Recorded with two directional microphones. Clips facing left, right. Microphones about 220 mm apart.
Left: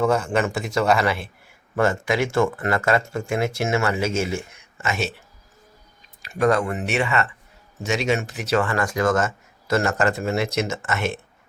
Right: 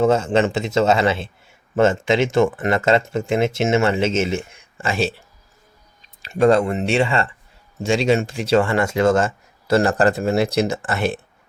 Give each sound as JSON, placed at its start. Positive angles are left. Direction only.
{"t": 0.0, "sound": "a man's voice", "side_deg": -25}
{"t": 6.2, "sound": "a man's voice", "side_deg": -25}